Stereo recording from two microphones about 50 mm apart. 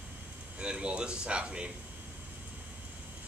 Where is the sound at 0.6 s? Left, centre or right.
Centre.